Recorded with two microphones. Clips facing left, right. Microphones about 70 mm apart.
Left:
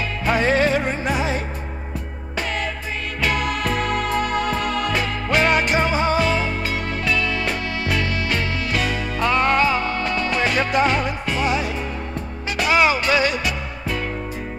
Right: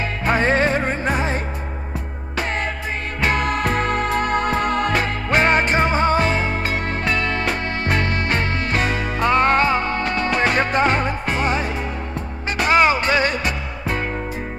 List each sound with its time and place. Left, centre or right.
0.2 s music: right
3.2 s music: right